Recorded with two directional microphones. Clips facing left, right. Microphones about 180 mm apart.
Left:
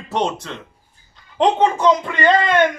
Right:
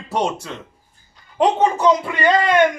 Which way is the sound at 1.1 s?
10° right (ahead or behind).